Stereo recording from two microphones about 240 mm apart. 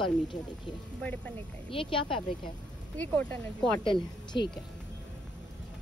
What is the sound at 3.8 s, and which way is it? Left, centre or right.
Speech, centre.